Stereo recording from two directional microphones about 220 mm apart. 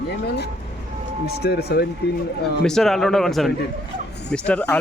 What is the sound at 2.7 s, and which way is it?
Speech, centre (ahead or behind).